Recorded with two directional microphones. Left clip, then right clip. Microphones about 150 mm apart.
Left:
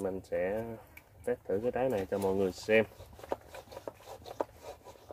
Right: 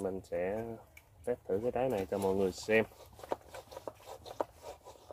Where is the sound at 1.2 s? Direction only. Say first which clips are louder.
Left 2 dB; 30° right (ahead or behind).